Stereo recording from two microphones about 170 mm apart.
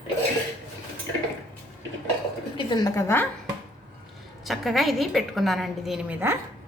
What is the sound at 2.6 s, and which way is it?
Speech, 25° left (ahead or behind).